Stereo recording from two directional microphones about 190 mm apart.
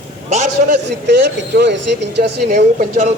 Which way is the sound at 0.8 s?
65° right (ahead or behind).